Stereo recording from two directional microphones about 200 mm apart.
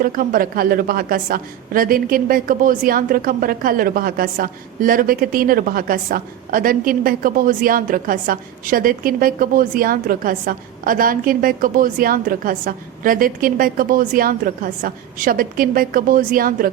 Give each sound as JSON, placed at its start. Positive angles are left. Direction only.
{"t": 0.0, "sound": "a woman's voice", "side_deg": -45}